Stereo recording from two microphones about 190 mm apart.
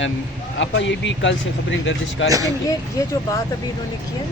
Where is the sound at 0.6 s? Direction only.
70° left (ahead or behind).